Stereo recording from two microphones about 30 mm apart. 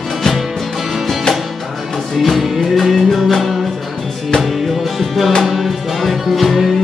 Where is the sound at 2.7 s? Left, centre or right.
Centre.